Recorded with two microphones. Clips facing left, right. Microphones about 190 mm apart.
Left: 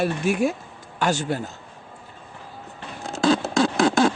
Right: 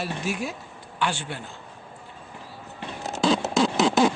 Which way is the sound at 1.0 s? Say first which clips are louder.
Left 6 dB; 40° left (ahead or behind).